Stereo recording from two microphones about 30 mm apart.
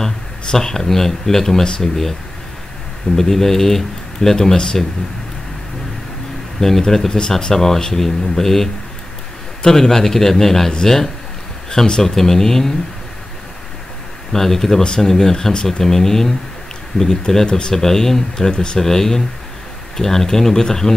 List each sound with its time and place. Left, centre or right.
0.0 s speech: centre
3.2 s speech: centre
6.6 s speech: centre
14.3 s speech: centre
17.5 s speech: left
17.7 s speech: centre
18.5 s speech: left
18.8 s speech: centre